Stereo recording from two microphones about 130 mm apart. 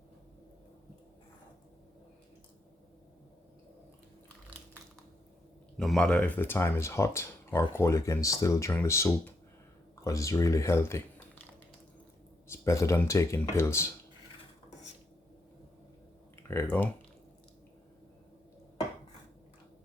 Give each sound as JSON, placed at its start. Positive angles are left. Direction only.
{"t": 5.7, "sound": "speech", "side_deg": 5}
{"t": 12.5, "sound": "speech", "side_deg": 20}
{"t": 16.5, "sound": "speech", "side_deg": 15}